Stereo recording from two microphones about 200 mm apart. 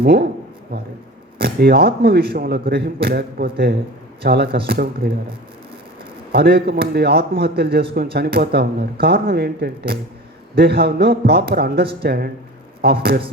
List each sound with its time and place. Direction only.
0.0 s a man's voice: 55° right (ahead or behind)
6.3 s a man's voice: 50° right (ahead or behind)